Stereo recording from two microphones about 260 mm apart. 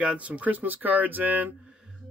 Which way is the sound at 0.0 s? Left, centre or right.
Centre.